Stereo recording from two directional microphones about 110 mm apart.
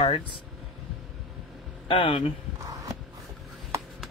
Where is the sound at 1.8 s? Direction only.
50° left (ahead or behind).